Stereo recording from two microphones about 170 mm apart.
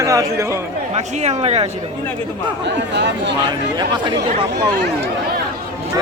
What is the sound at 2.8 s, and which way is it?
Speech, 90° right.